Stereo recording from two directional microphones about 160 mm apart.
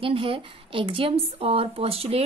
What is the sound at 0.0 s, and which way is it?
Speech, 35° right (ahead or behind).